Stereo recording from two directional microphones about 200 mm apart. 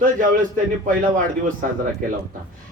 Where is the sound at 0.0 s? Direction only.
40° right (ahead or behind).